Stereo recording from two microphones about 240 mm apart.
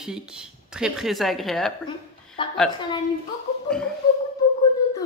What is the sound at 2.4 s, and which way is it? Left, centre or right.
Speech, left.